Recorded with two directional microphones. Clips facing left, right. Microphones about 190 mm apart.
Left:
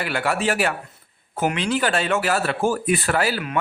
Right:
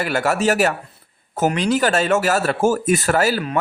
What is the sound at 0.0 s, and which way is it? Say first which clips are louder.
A man's voice: right 4 dB; 45° right (ahead or behind).